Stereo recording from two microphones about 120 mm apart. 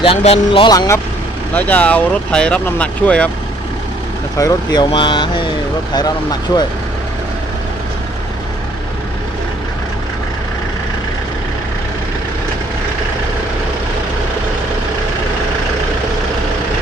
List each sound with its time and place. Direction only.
0.0 s speech: 55° left (ahead or behind)
0.7 s speech: 30° left (ahead or behind)
1.5 s speech: 15° left (ahead or behind)
4.4 s speech: 30° left (ahead or behind)
4.9 s speech: 40° left (ahead or behind)